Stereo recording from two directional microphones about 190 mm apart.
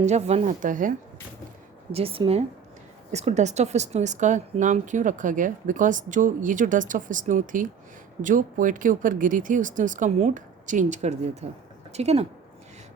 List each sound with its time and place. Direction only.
0.0 s speech: 35° right (ahead or behind)
1.9 s speech: 30° right (ahead or behind)